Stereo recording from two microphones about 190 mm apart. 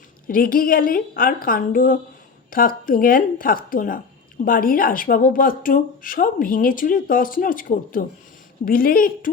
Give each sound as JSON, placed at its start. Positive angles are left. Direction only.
{"t": 0.3, "sound": "speech", "side_deg": 50}